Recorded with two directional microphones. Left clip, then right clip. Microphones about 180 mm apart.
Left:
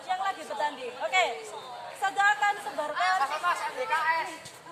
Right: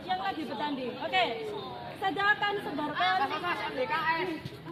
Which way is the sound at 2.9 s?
40° left (ahead or behind).